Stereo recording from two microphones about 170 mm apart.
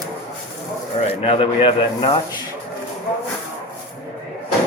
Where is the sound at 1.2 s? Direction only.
35° left (ahead or behind).